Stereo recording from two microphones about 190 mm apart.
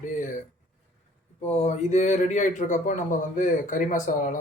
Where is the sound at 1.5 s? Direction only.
35° left (ahead or behind).